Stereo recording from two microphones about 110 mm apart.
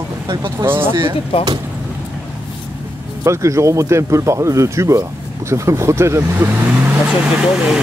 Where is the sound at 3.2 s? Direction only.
25° right (ahead or behind).